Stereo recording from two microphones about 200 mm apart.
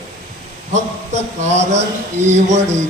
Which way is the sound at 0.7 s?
35° right (ahead or behind).